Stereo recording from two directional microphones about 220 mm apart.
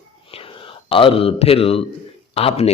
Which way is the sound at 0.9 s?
25° left (ahead or behind).